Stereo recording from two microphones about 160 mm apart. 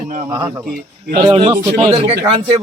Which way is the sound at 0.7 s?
70° right (ahead or behind).